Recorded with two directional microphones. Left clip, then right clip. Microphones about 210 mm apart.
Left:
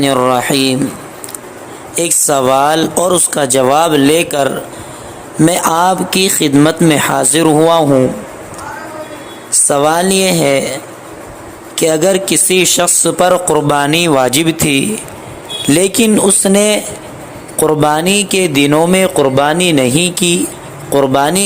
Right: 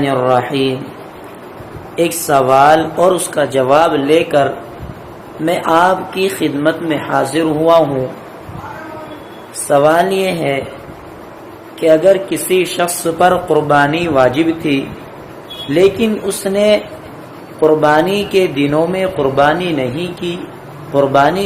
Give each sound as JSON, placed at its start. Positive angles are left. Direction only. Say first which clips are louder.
{"t": 0.0, "sound": "speech", "louder": "left 2 dB", "side_deg": 55}
{"t": 2.0, "sound": "speech", "louder": "even", "side_deg": 55}
{"t": 5.5, "sound": "speech", "louder": "right 1 dB", "side_deg": 55}
{"t": 9.6, "sound": "speech", "louder": "right 1 dB", "side_deg": 50}
{"t": 11.8, "sound": "speech", "louder": "right 2 dB", "side_deg": 50}